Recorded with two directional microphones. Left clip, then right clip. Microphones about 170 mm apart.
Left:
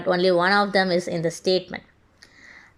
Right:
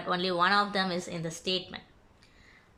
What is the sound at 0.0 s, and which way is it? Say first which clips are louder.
Speech: left 8 dB; 35° left (ahead or behind).